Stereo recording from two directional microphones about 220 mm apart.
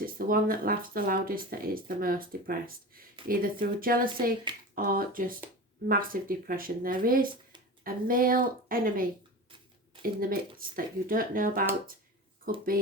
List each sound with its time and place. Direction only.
0.0 s speech: 40° right (ahead or behind)
10.2 s speech: 40° right (ahead or behind)